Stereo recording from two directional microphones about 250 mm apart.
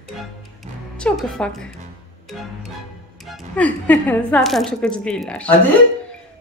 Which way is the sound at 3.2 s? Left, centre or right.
Centre.